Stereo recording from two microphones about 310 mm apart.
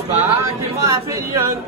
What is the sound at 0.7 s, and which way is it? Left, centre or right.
Speech, centre.